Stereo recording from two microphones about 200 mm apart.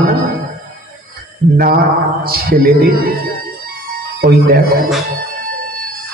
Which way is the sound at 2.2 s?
50° right (ahead or behind).